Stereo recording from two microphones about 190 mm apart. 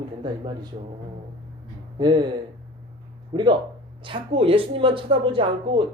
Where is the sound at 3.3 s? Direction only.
25° right (ahead or behind).